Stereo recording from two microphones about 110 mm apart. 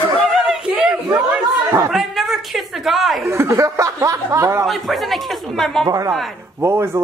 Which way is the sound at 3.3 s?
25° right (ahead or behind).